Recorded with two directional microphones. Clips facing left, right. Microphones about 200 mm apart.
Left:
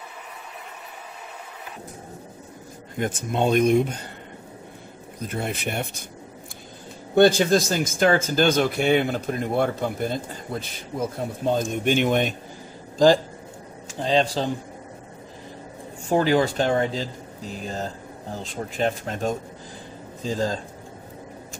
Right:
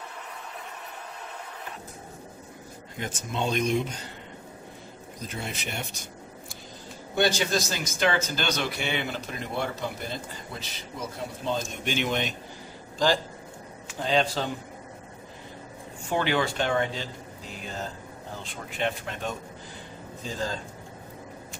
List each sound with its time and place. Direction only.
3.0 s speech: 55° left (ahead or behind)
5.2 s speech: 55° left (ahead or behind)
7.2 s speech: 55° left (ahead or behind)
13.9 s speech: 35° left (ahead or behind)
16.1 s speech: 35° left (ahead or behind)